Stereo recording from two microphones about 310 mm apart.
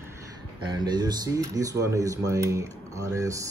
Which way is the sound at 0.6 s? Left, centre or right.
Centre.